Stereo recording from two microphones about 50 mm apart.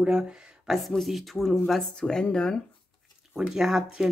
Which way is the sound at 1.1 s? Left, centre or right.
Centre.